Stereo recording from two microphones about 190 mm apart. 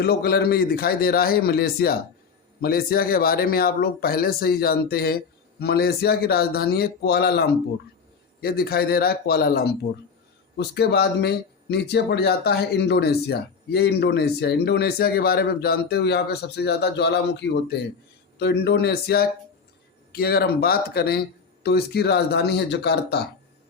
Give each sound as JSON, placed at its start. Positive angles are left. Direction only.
{"t": 0.0, "sound": "speech", "side_deg": 55}